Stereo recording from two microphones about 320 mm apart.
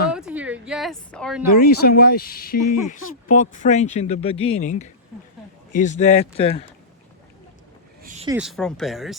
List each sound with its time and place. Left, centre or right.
0.1 s a woman's voice: centre
1.6 s speech: left
8.0 s a sound: right
8.3 s speech: centre